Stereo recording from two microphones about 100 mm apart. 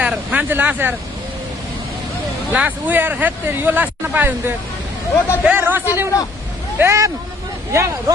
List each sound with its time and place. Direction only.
0.0 s a sound: 10° right (ahead or behind)
0.5 s speech: 20° right (ahead or behind)
2.5 s speech: 15° right (ahead or behind)